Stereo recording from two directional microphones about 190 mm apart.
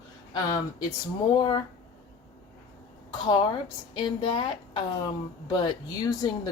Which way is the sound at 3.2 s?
25° left (ahead or behind).